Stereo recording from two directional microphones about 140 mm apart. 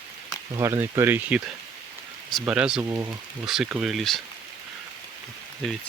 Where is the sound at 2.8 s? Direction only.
20° right (ahead or behind).